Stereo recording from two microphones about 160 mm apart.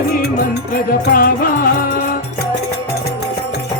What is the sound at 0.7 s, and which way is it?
Music, 65° left (ahead or behind).